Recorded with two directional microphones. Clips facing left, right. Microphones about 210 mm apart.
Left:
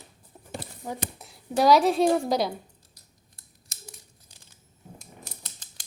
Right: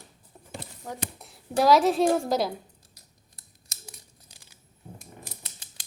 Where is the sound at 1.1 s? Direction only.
Centre (ahead or behind).